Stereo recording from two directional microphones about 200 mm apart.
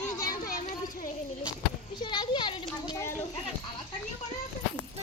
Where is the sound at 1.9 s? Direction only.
20° left (ahead or behind).